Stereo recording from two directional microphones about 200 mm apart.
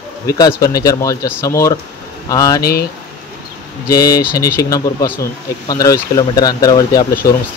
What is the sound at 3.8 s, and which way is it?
Speech, 20° left (ahead or behind).